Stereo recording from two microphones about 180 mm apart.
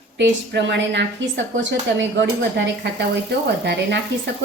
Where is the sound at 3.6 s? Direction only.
70° right (ahead or behind).